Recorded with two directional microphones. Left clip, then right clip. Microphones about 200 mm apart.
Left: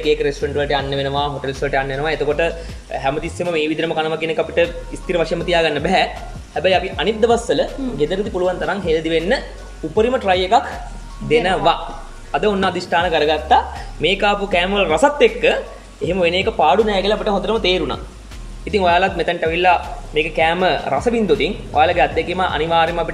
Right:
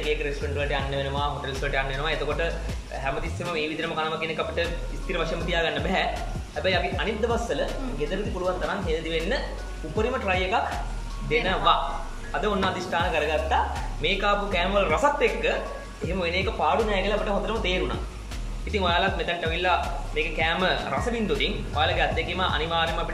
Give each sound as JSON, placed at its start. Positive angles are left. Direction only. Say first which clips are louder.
{"t": 0.0, "sound": "speech", "louder": "left 10 dB", "side_deg": 45}